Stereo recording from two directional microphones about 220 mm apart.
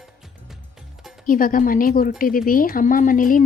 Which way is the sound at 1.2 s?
40° left (ahead or behind).